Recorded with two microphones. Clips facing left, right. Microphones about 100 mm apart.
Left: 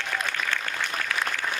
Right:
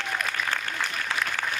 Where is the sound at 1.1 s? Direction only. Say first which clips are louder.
Right 1 dB; 25° right (ahead or behind).